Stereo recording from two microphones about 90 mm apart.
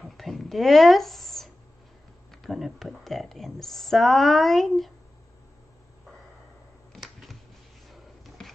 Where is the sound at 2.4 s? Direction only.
Centre (ahead or behind).